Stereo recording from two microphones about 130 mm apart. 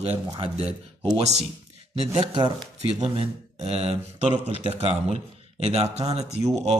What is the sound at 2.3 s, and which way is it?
Speech, 35° right (ahead or behind).